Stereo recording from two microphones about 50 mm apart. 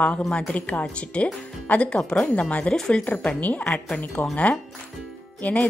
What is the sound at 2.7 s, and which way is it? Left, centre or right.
Speech, centre.